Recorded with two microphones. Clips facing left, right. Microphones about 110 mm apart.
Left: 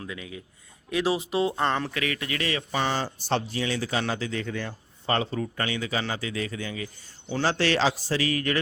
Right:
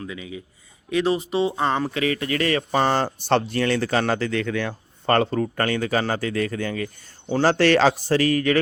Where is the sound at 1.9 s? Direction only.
30° right (ahead or behind).